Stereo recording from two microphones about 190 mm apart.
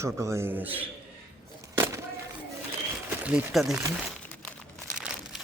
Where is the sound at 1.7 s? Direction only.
15° right (ahead or behind).